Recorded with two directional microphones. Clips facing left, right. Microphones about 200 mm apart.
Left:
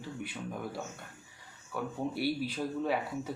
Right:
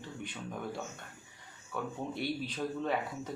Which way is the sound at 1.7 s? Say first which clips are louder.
Left 3 dB; 5° left (ahead or behind).